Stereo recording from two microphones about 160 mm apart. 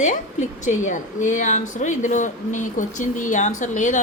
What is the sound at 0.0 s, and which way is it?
A woman's voice, 50° left (ahead or behind).